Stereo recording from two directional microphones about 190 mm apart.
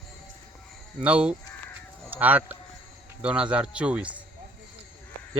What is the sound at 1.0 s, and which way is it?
A man's voice, 5° right (ahead or behind).